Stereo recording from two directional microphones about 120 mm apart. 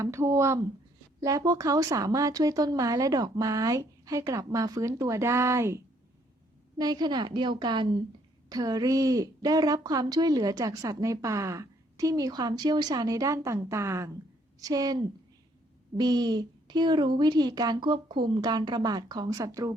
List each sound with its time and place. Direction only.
0.0 s a woman's voice: 25° right (ahead or behind)